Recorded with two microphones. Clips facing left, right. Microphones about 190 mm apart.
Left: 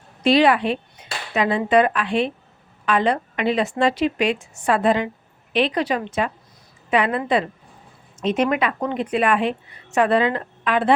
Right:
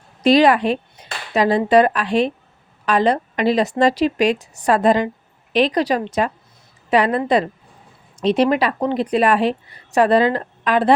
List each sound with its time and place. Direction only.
0.2 s a woman's voice: 40° right (ahead or behind)